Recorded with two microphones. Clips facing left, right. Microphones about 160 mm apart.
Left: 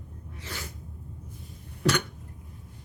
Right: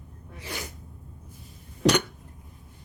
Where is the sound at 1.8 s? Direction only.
20° right (ahead or behind).